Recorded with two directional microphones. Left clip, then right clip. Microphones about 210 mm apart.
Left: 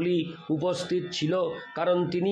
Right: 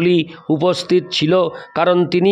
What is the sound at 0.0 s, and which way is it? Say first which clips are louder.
Speech: right 11 dB; 55° right (ahead or behind).